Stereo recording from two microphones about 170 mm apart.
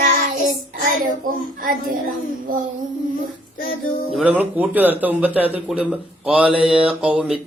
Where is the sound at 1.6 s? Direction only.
55° right (ahead or behind).